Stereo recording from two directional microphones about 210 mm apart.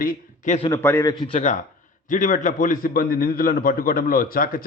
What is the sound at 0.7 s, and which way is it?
Speech, 10° left (ahead or behind).